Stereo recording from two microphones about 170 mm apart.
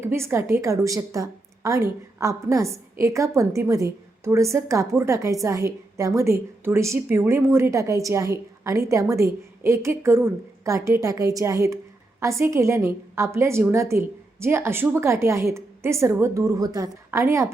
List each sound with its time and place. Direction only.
0.0 s a woman's voice: 15° right (ahead or behind)